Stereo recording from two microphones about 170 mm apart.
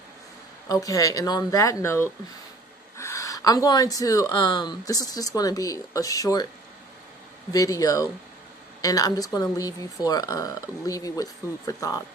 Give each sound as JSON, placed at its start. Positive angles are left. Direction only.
{"t": 0.7, "sound": "speech", "side_deg": 20}
{"t": 7.5, "sound": "speech", "side_deg": 20}